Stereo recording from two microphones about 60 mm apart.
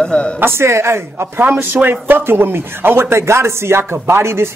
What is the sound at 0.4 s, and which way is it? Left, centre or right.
Speech, right.